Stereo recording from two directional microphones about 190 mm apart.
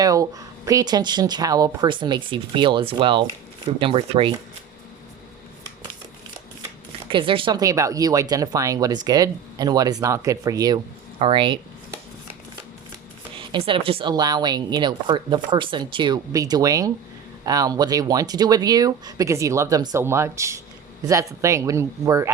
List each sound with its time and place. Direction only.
0.0 s speech: 20° right (ahead or behind)
7.1 s speech: 25° right (ahead or behind)
13.3 s speech: 25° right (ahead or behind)